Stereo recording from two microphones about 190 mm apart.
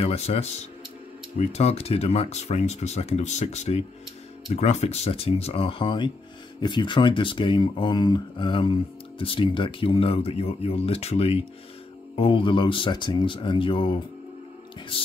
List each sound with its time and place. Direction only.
0.0 s speech: 30° left (ahead or behind)